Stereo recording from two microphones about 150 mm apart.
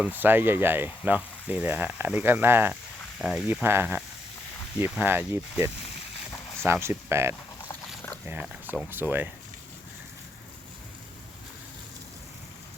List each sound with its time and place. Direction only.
0.2 s speech: 15° right (ahead or behind)
3.2 s speech: centre (ahead or behind)
3.6 s speech: 15° right (ahead or behind)